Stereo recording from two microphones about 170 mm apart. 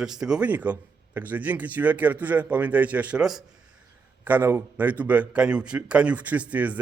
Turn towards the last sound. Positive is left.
turn(degrees=-10)  # may be behind; listen again after turning